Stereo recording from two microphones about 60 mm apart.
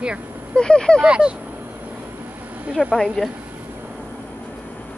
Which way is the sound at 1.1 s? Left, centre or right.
Centre.